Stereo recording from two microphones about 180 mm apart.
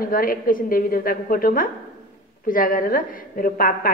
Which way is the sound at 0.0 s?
50° left (ahead or behind).